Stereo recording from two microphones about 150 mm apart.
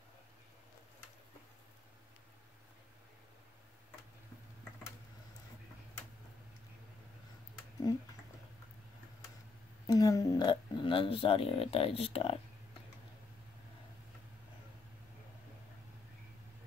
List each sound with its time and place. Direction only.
9.8 s speech: 25° left (ahead or behind); by 12.4 s 40° left (ahead or behind)